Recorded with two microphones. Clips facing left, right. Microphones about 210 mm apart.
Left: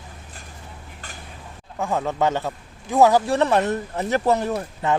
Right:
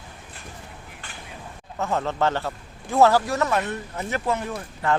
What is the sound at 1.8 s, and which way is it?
A man's voice, 15° left (ahead or behind).